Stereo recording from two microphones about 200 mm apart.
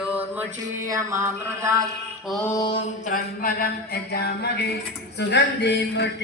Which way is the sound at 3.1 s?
45° left (ahead or behind).